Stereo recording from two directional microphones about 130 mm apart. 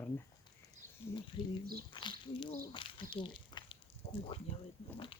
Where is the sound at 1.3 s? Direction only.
40° left (ahead or behind).